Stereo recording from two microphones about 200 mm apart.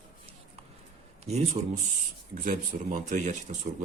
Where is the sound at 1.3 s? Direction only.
35° right (ahead or behind).